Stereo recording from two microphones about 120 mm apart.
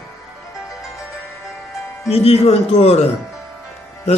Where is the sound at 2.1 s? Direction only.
60° left (ahead or behind).